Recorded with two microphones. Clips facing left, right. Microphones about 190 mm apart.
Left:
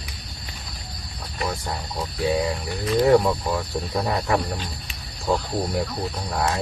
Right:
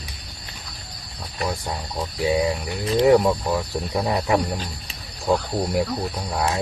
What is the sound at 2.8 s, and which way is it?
Speech, 25° right (ahead or behind).